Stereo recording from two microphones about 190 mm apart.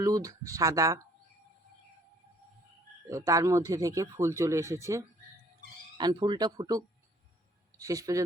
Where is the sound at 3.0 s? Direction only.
15° right (ahead or behind).